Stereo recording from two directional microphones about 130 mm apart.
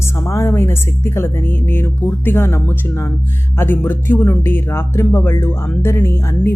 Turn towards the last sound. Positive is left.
turn(degrees=20)  # may be behind; listen again after turning